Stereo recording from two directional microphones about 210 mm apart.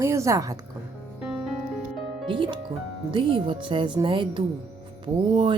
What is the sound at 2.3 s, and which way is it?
Speech, 20° right (ahead or behind).